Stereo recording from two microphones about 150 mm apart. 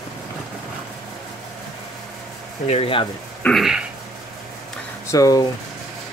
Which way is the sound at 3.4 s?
Centre (ahead or behind).